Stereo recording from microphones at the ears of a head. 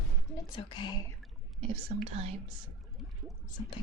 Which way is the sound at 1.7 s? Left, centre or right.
Right.